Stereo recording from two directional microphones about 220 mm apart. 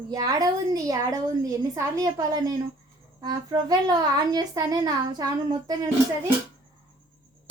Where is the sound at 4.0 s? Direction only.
15° right (ahead or behind).